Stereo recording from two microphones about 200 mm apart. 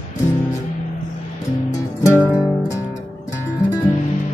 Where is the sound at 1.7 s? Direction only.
15° left (ahead or behind).